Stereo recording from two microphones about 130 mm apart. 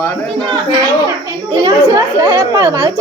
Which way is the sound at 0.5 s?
30° right (ahead or behind).